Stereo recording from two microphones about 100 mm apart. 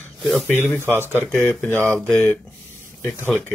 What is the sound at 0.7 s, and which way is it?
Speech, 25° right (ahead or behind).